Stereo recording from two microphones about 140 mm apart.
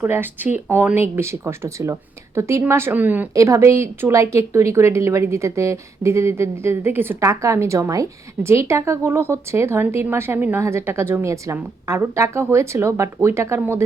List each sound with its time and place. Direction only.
0.0 s speech: 15° right (ahead or behind)